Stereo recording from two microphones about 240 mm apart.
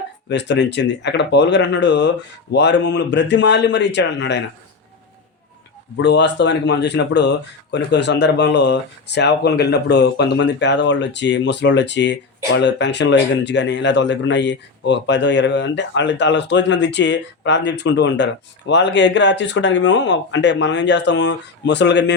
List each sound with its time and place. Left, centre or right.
0.3 s speech: left
6.0 s speech: left